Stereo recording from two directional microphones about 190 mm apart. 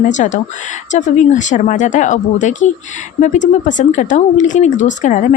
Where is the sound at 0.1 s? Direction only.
40° left (ahead or behind).